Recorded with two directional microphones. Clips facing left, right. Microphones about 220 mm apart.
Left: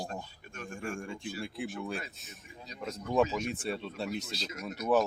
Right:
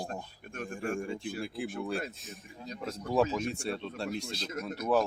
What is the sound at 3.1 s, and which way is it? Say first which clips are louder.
Speech: even; centre (ahead or behind).